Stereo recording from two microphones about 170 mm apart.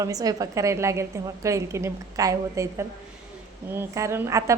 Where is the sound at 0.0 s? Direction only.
20° right (ahead or behind).